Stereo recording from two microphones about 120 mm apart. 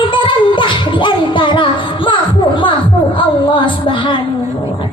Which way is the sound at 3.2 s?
45° left (ahead or behind).